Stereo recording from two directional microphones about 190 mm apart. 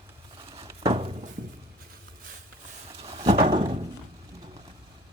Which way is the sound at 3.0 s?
35° right (ahead or behind).